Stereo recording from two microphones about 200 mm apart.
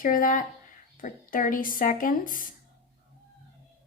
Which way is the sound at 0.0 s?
45° left (ahead or behind).